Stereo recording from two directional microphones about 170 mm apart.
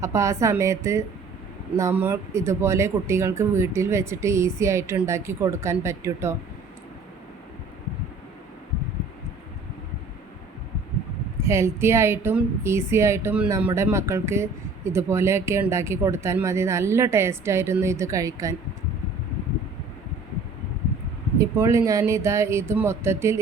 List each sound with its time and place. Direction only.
0.0 s speech: 15° right (ahead or behind)
11.4 s speech: 15° right (ahead or behind)
21.3 s speech: 15° right (ahead or behind)